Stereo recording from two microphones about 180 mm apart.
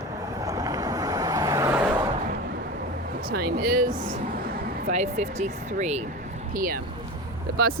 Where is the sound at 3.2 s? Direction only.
55° right (ahead or behind).